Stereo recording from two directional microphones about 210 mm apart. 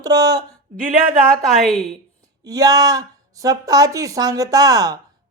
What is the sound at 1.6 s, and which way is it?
Speech, centre (ahead or behind).